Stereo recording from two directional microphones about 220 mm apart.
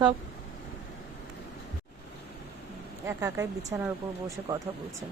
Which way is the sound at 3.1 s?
10° right (ahead or behind).